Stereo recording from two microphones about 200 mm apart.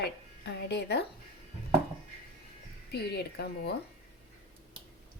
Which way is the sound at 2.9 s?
55° left (ahead or behind).